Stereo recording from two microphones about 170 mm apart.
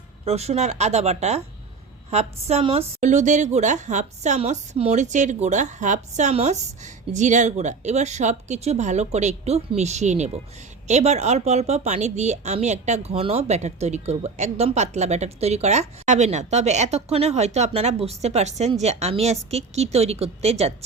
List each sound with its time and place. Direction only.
0.3 s a woman's voice: 40° right (ahead or behind)